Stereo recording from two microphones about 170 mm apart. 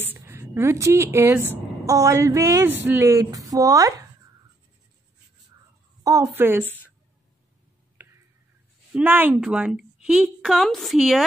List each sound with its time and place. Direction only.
0.0 s a woman's voice: 15° right (ahead or behind)
6.0 s speech: 20° right (ahead or behind)
8.0 s a sound: 10° right (ahead or behind)
8.9 s a woman's voice: 10° right (ahead or behind)